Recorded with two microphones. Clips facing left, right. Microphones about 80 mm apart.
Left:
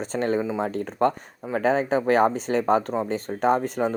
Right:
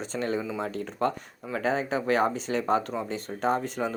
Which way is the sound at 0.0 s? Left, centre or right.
Left.